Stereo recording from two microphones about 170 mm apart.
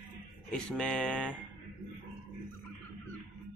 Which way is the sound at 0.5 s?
5° left (ahead or behind).